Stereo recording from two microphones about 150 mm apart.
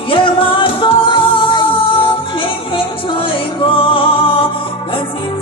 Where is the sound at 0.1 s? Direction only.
35° left (ahead or behind).